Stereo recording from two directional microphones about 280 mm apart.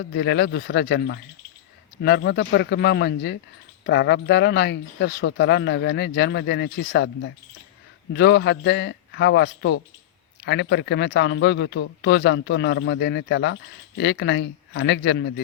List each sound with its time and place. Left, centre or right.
0.0 s speech: left